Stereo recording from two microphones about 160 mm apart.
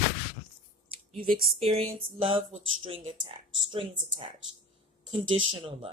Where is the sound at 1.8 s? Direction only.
35° right (ahead or behind).